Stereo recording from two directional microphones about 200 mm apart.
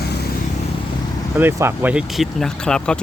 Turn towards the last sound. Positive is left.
turn(degrees=5)  # may be behind; listen again after turning